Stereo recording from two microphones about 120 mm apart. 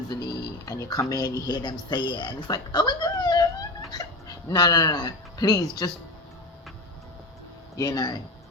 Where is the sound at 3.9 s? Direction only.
30° left (ahead or behind).